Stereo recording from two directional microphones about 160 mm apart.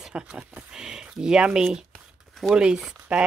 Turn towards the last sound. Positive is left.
turn(degrees=-5)  # may be behind; listen again after turning